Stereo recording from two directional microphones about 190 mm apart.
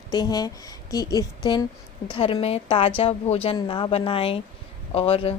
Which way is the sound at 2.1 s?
30° left (ahead or behind).